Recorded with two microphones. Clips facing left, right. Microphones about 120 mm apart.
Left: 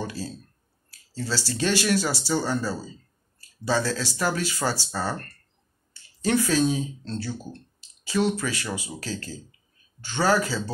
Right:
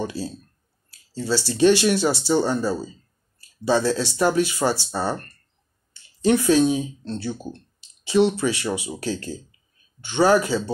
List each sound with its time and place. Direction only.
0.0 s speech: 25° right (ahead or behind)
6.2 s speech: 20° right (ahead or behind)